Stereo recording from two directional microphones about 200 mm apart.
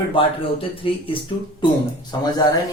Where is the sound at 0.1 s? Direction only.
25° left (ahead or behind).